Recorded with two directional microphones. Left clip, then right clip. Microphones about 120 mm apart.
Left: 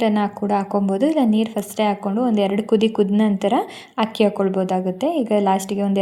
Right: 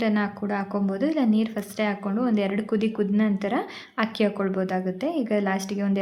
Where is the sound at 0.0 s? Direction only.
30° left (ahead or behind).